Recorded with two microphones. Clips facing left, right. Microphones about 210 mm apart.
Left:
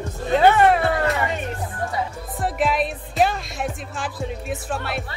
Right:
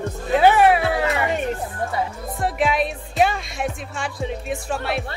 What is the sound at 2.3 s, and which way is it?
Music, centre (ahead or behind).